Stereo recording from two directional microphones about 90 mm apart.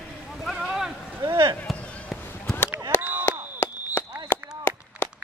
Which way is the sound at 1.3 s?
55° right (ahead or behind).